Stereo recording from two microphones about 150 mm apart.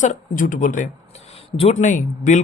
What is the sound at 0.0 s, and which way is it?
Speech, 60° left (ahead or behind).